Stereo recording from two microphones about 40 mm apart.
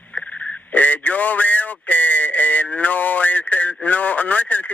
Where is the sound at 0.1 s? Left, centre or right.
Left.